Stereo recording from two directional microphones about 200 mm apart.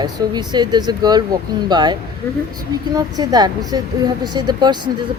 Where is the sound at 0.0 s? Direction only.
20° right (ahead or behind).